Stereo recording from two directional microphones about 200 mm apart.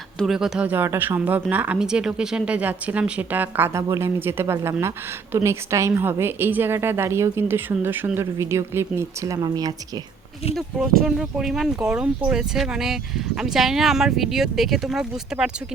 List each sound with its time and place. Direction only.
0.2 s speech: centre (ahead or behind); by 10.0 s 20° right (ahead or behind)
10.5 s speech: centre (ahead or behind)